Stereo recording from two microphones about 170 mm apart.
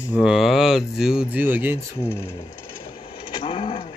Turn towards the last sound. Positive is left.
turn(degrees=30)  # may be behind; listen again after turning